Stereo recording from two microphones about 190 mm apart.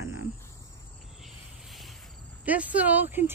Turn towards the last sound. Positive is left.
turn(degrees=-10)  # may be behind; listen again after turning